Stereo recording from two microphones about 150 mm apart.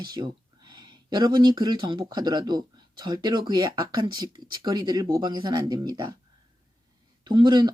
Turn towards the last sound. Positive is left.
turn(degrees=-30)  # may be behind; listen again after turning